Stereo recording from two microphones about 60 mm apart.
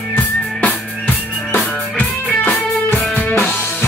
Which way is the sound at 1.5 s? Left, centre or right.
Left.